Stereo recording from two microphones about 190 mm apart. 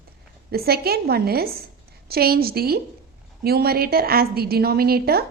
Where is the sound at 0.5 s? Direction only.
55° right (ahead or behind).